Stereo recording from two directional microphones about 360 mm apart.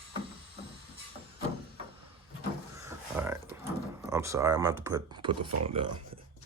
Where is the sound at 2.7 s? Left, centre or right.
Centre.